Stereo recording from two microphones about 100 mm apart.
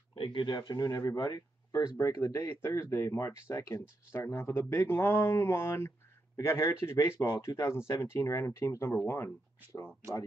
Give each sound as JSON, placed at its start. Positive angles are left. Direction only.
{"t": 0.2, "sound": "speech", "side_deg": 55}